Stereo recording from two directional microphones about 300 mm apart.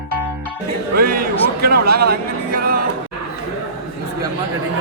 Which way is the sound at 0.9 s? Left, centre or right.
Right.